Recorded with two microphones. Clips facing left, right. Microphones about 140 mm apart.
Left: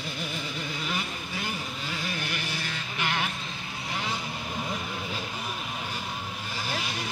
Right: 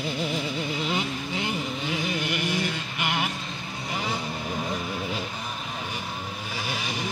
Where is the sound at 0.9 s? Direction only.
20° right (ahead or behind).